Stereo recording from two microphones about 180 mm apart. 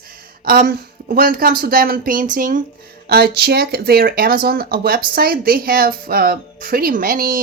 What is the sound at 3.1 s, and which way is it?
Speech, 60° right (ahead or behind).